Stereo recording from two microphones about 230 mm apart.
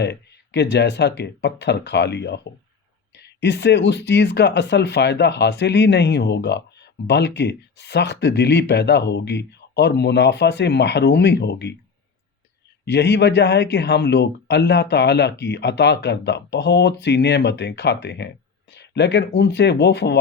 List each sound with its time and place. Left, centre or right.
0.0 s speech: left
12.8 s speech: left